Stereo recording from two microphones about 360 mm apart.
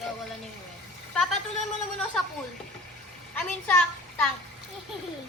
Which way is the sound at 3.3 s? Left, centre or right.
Centre.